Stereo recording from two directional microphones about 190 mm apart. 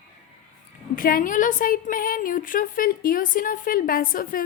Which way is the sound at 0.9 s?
50° left (ahead or behind).